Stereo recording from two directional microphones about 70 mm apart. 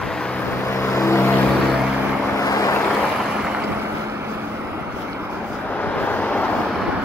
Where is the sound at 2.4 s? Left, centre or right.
Left.